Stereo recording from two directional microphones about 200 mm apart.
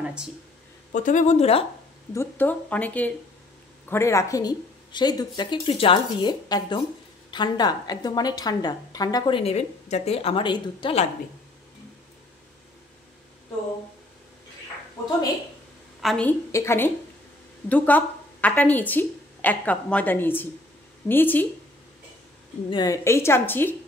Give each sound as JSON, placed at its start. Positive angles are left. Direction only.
{"t": 0.9, "sound": "speech", "side_deg": 40}
{"t": 2.1, "sound": "a woman's voice", "side_deg": 10}
{"t": 16.0, "sound": "a woman's voice", "side_deg": 5}
{"t": 22.7, "sound": "a woman's voice", "side_deg": 20}